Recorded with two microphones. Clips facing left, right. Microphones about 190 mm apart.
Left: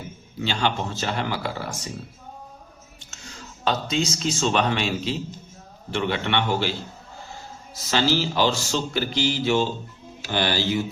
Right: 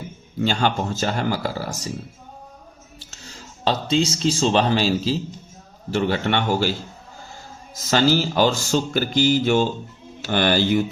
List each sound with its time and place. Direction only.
0.4 s speech: 45° right (ahead or behind)
3.0 s speech: 30° right (ahead or behind)
7.9 s speech: 45° right (ahead or behind)